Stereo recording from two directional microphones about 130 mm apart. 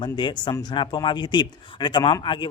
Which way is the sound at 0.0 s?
35° left (ahead or behind).